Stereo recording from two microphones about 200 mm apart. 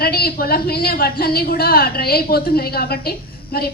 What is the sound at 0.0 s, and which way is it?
A woman's voice, 50° left (ahead or behind).